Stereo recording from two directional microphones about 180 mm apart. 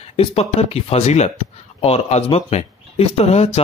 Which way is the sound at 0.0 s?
35° left (ahead or behind).